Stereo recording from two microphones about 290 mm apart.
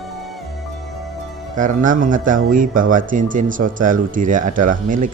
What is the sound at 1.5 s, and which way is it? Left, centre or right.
A man's voice, right.